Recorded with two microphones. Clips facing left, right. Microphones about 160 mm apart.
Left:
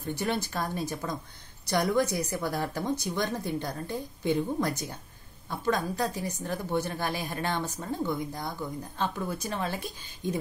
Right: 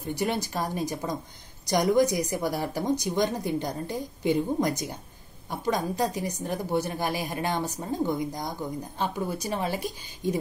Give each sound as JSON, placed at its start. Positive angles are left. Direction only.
{"t": 0.0, "sound": "speech", "side_deg": -10}